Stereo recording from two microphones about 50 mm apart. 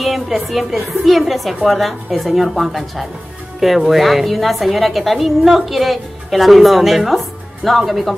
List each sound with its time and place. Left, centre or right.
0.0 s a woman's voice: centre